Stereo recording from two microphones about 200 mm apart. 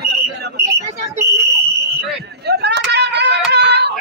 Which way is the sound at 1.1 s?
15° right (ahead or behind).